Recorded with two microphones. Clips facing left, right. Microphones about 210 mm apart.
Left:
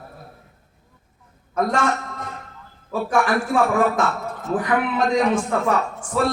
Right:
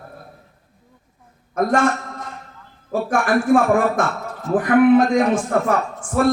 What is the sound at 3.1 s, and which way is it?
A man's voice, 50° right (ahead or behind).